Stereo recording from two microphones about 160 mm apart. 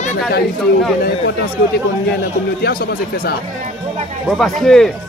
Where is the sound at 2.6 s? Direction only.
65° left (ahead or behind).